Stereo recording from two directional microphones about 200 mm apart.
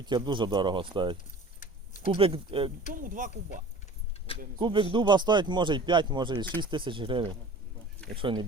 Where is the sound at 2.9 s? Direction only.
40° right (ahead or behind).